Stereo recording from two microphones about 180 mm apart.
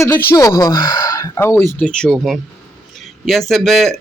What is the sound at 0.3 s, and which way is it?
Speech, 20° left (ahead or behind).